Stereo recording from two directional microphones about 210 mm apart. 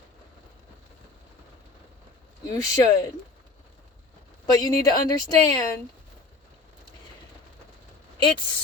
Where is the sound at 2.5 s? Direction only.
20° left (ahead or behind).